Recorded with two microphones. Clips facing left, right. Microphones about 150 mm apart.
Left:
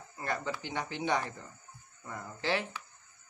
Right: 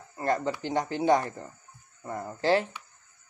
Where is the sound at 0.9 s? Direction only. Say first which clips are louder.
Right 8 dB; 20° left (ahead or behind).